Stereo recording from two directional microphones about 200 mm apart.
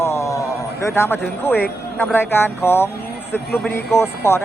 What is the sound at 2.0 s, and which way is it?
Speech, 10° left (ahead or behind).